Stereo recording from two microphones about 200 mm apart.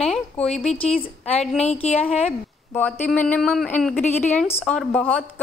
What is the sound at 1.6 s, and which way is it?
Speech, 30° left (ahead or behind).